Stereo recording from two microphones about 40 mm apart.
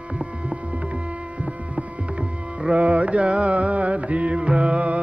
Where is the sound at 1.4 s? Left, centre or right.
Right.